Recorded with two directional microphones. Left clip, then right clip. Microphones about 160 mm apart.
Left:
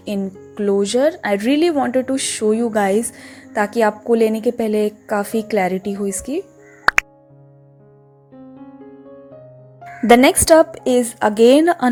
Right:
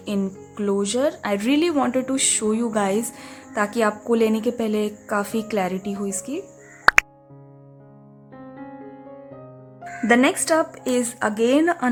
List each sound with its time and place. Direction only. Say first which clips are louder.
0.0 s a woman's voice: left 2 dB; 20° left (ahead or behind)
6.9 s music: even; centre (ahead or behind)
10.1 s a woman's voice: left 8 dB; 30° left (ahead or behind)